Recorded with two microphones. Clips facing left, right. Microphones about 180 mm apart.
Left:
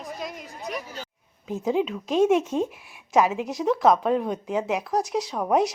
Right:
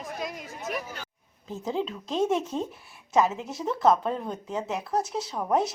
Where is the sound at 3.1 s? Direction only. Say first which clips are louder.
Left 3 dB; 80° left.